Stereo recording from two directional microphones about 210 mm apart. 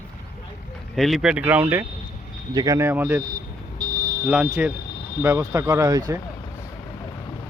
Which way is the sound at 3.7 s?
20° right (ahead or behind).